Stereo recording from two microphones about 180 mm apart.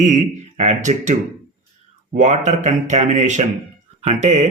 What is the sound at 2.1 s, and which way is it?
Speech, 40° right (ahead or behind).